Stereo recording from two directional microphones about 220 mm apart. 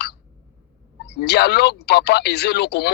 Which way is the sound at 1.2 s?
50° left (ahead or behind).